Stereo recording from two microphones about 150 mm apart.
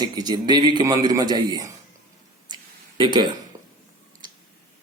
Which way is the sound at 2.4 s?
30° right (ahead or behind).